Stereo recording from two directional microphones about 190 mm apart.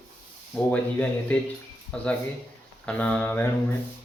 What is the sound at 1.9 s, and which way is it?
Speech, 5° left (ahead or behind).